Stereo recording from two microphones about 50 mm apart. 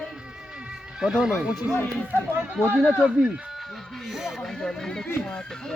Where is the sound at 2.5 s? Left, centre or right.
Right.